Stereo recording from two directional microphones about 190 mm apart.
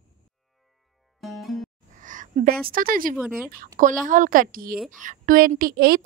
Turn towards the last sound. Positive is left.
turn(degrees=-50)  # may be behind; listen again after turning